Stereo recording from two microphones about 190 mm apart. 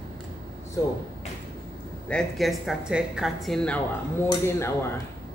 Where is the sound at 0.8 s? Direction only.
15° left (ahead or behind).